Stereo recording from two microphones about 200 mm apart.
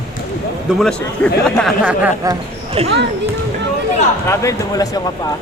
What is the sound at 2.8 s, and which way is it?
Speech, 30° right (ahead or behind).